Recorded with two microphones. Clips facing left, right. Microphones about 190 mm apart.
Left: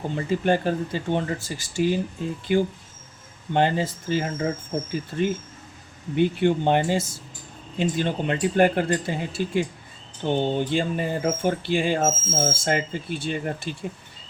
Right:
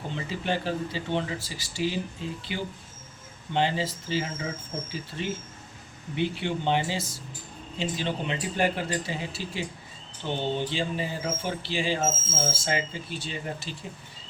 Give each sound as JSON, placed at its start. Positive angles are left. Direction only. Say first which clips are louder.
{"t": 0.1, "sound": "speech", "louder": "left 8 dB", "side_deg": 50}
{"t": 3.5, "sound": "speech", "louder": "left 5 dB", "side_deg": 50}